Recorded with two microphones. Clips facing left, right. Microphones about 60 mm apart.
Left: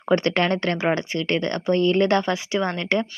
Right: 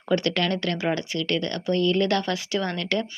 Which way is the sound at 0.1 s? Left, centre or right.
Left.